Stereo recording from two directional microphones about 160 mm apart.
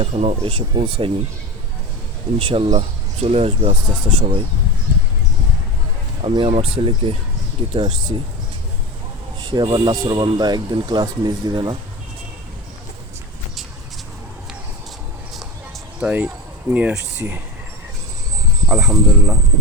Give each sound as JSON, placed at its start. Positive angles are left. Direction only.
{"t": 0.0, "sound": "speech", "side_deg": -40}
{"t": 2.4, "sound": "speech", "side_deg": -35}
{"t": 6.2, "sound": "speech", "side_deg": -35}
{"t": 9.5, "sound": "speech", "side_deg": -30}
{"t": 16.0, "sound": "speech", "side_deg": -10}
{"t": 18.7, "sound": "speech", "side_deg": -5}